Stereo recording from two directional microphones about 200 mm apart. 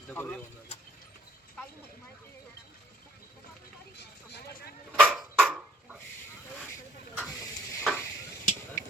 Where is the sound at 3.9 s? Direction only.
55° left (ahead or behind).